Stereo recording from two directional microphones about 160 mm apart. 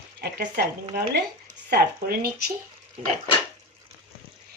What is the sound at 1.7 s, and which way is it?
Speech, 75° right (ahead or behind).